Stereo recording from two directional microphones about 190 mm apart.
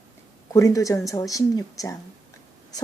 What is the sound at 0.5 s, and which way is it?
Speech, 15° left (ahead or behind).